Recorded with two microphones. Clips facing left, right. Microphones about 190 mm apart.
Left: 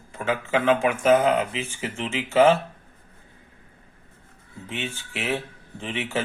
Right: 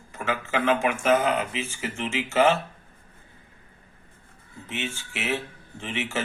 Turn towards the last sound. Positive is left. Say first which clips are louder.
# left 2 dB
turn(degrees=30)  # may be behind; listen again after turning